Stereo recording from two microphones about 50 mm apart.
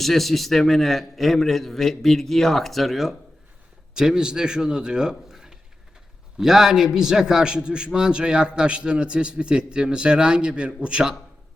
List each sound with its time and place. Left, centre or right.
0.0 s a man's voice: centre
3.9 s a man's voice: centre